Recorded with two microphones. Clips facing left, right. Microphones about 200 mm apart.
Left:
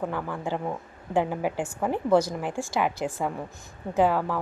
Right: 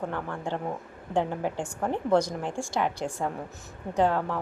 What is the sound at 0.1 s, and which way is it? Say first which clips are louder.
A woman's voice: left 2 dB; 5° left (ahead or behind).